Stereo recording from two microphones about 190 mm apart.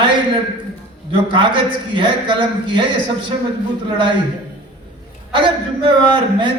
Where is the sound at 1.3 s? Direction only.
25° right (ahead or behind).